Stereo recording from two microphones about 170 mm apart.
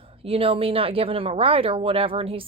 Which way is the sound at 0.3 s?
35° right (ahead or behind).